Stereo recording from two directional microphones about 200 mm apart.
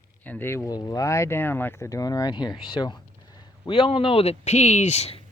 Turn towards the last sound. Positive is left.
turn(degrees=30)  # may be behind; listen again after turning